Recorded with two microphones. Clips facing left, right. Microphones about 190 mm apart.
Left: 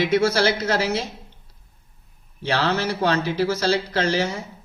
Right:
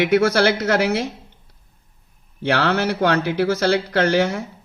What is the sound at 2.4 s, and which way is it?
Speech, 65° right (ahead or behind).